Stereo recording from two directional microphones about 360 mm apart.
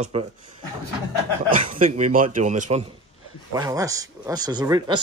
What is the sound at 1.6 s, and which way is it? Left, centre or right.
Speech, right.